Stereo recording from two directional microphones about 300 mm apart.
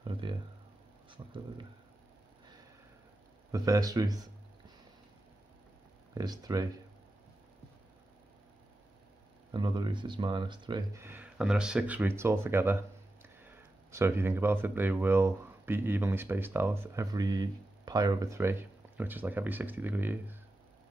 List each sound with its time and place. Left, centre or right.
0.0 s a sound: centre
1.1 s speech: centre
3.5 s speech: centre
6.1 s speech: centre
9.5 s speech: centre